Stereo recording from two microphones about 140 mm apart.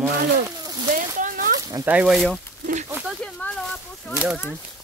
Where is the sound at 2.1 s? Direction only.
Centre (ahead or behind).